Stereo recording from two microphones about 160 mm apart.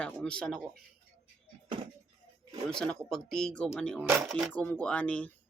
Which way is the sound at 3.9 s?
10° right (ahead or behind).